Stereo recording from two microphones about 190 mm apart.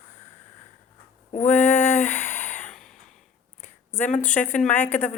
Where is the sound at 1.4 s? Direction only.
10° left (ahead or behind).